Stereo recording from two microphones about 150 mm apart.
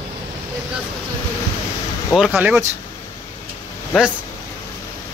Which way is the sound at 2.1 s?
5° right (ahead or behind).